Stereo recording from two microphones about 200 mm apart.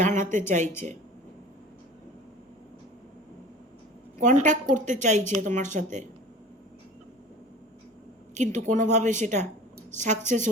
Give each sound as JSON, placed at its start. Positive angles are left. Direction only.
{"t": 0.0, "sound": "speech", "side_deg": -40}
{"t": 4.2, "sound": "a woman's voice", "side_deg": -35}
{"t": 8.4, "sound": "a woman's voice", "side_deg": -40}